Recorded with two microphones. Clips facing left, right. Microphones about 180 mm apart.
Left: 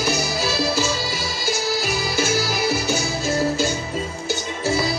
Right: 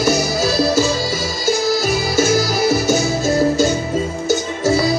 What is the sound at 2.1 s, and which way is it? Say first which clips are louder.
Music: right 7 dB; 40° right (ahead or behind).